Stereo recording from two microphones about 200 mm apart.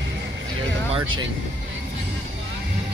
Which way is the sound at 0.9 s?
25° right (ahead or behind).